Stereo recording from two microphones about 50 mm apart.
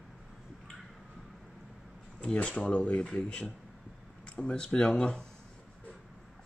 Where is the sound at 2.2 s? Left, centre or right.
Centre.